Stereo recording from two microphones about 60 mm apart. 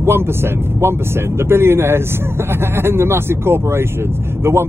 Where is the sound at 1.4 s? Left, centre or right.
Right.